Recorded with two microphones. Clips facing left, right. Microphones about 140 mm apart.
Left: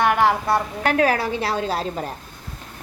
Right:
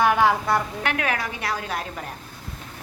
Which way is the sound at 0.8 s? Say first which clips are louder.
Left 7 dB; 35° left (ahead or behind).